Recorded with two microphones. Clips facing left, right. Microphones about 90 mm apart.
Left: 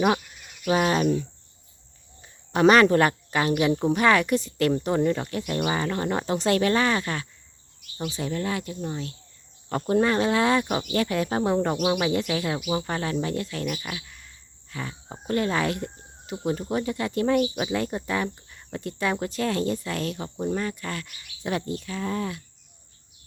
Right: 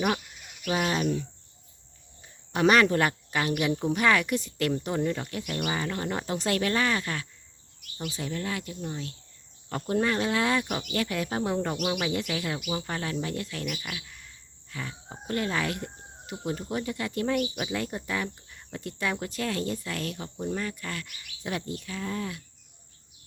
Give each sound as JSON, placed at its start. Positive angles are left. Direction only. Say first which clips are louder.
{"t": 0.7, "sound": "speech", "louder": "left 5 dB", "side_deg": 55}
{"t": 2.5, "sound": "speech", "louder": "left 5 dB", "side_deg": 40}